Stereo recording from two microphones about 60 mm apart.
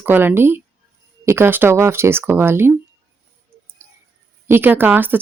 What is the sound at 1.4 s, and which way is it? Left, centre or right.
Speech, right.